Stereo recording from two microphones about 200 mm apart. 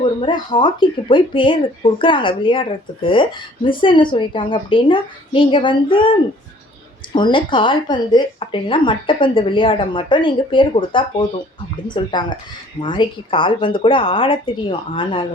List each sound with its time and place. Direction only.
0.0 s speech: 25° left (ahead or behind)